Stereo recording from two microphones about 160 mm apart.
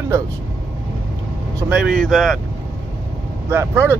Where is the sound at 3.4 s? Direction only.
15° right (ahead or behind).